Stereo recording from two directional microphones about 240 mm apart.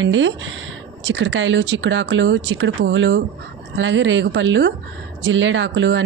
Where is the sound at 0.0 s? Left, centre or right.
Right.